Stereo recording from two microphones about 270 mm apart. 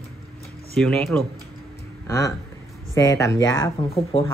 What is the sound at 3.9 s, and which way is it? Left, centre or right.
Speech, left.